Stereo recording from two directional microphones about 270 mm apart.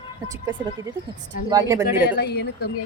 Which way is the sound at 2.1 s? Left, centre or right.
Left.